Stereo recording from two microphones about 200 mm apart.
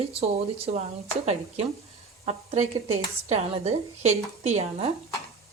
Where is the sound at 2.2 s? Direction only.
30° right (ahead or behind).